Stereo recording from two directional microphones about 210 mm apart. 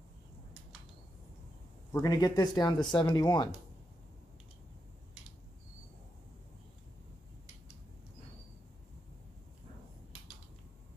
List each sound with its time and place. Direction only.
1.9 s speech: 15° left (ahead or behind)